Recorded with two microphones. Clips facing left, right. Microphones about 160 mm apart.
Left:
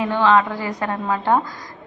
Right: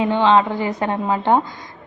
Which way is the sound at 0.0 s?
20° right (ahead or behind).